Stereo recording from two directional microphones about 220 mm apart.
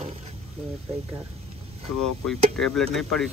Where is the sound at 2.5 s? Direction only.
Centre (ahead or behind).